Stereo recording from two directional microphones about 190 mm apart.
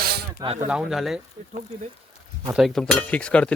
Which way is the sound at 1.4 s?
35° right (ahead or behind).